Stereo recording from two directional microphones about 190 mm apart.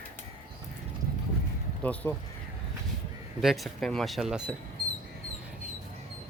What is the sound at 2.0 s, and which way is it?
Speech, 15° left (ahead or behind).